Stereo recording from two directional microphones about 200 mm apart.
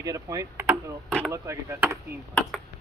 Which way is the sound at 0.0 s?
15° right (ahead or behind).